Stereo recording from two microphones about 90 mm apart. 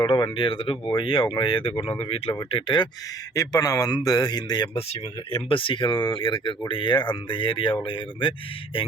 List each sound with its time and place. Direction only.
0.3 s speech: 70° left (ahead or behind); by 2.3 s 90° left
2.5 s speech: 70° left (ahead or behind)
3.3 s speech: 45° left (ahead or behind)
5.3 s speech: 75° left (ahead or behind)